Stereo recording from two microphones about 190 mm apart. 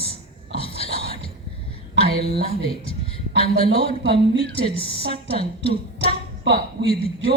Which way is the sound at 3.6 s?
30° left (ahead or behind).